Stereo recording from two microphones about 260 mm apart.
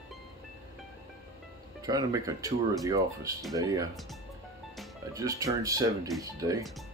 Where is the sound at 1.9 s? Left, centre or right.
Centre.